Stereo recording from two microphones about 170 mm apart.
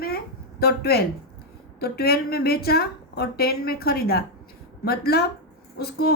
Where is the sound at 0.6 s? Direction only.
70° left (ahead or behind).